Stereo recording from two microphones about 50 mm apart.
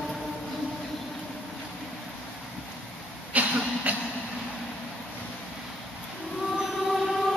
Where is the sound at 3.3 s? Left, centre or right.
Right.